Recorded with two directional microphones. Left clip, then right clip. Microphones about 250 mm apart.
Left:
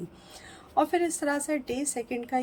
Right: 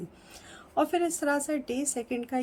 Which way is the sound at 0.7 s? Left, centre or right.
Centre.